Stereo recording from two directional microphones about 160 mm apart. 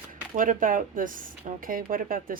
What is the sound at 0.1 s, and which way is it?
Speech, 55° right (ahead or behind).